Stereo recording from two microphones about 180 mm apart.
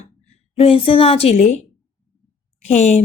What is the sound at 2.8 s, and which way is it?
Speech, 40° left (ahead or behind).